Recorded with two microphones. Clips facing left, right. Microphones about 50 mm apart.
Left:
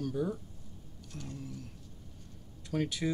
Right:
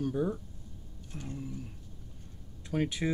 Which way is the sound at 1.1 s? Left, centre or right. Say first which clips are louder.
Right 3 dB; right.